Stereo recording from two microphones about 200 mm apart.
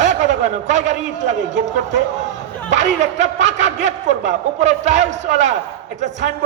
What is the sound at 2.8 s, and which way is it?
A man's voice, 35° right (ahead or behind).